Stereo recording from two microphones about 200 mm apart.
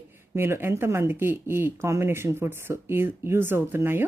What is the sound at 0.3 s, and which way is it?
A woman's voice, 10° right (ahead or behind).